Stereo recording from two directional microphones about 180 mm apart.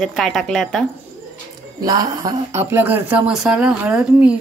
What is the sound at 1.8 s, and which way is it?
Speech, 20° right (ahead or behind).